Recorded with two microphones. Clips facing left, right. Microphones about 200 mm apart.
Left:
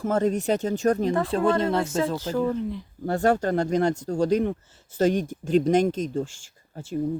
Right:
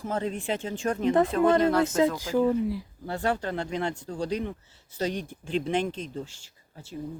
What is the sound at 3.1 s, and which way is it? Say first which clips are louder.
Speech: left 7 dB; 45° left (ahead or behind).